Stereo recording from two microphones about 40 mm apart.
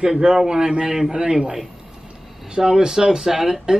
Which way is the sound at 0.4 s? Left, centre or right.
Centre.